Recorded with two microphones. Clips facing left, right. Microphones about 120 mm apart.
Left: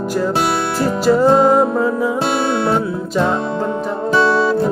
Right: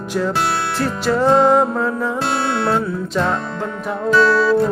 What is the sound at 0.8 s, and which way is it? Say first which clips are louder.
Music: left 6 dB; 10° left (ahead or behind).